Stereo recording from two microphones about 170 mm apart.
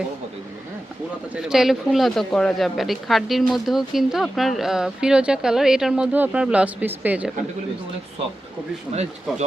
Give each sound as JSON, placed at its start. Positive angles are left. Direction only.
{"t": 1.4, "sound": "speech", "side_deg": -5}